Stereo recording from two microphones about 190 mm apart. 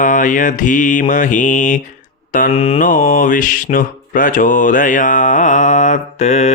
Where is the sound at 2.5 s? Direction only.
30° left (ahead or behind).